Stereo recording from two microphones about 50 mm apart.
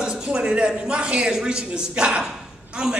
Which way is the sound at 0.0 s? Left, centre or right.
Centre.